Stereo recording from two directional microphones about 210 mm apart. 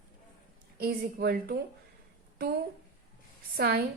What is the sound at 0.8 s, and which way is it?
Speech, 50° right (ahead or behind).